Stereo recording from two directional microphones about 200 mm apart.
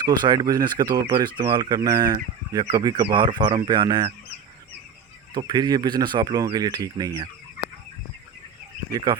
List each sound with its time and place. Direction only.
0.0 s speech: 20° right (ahead or behind)
5.3 s speech: 20° right (ahead or behind)